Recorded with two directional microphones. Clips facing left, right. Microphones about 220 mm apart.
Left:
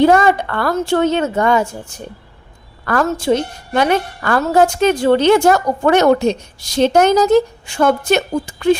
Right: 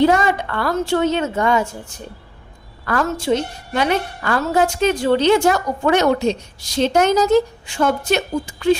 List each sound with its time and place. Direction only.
0.0 s a woman's voice: 55° left (ahead or behind)
2.8 s a woman's voice: 50° left (ahead or behind)